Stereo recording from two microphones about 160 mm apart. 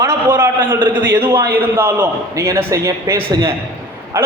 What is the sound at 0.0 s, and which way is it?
A man's voice, 15° right (ahead or behind).